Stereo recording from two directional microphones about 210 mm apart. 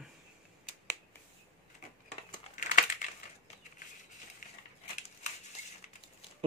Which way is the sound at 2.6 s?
35° left (ahead or behind).